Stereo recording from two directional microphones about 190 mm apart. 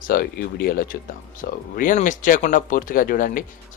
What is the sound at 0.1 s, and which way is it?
Speech, 50° left (ahead or behind).